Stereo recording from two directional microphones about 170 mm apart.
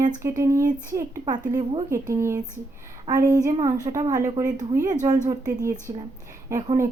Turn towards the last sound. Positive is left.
turn(degrees=-20)  # may be behind; listen again after turning